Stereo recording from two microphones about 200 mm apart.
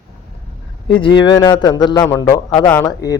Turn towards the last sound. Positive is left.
turn(degrees=15)  # may be behind; listen again after turning